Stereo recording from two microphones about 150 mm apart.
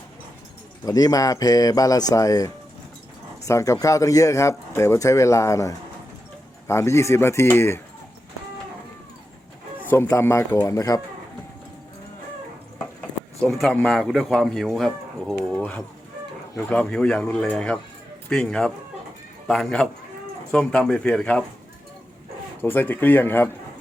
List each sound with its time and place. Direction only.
0.9 s speech: 25° left (ahead or behind)
9.8 s speech: 15° left (ahead or behind)
13.4 s speech: centre (ahead or behind)
22.6 s speech: 15° left (ahead or behind)